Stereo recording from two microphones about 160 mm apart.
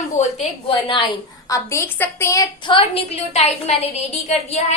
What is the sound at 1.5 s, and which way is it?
A woman's voice, 20° left (ahead or behind).